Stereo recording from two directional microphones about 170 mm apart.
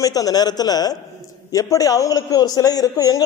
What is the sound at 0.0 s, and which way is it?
A man's voice, 20° left (ahead or behind).